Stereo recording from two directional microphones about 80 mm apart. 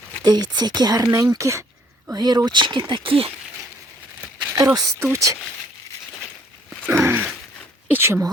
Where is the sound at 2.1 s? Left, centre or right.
Right.